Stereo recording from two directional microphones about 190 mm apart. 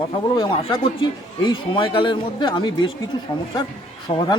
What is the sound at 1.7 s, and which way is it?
Speech, 25° left (ahead or behind).